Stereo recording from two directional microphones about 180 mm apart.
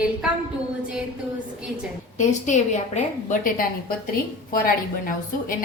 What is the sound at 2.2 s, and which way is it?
A woman's voice, 45° left (ahead or behind).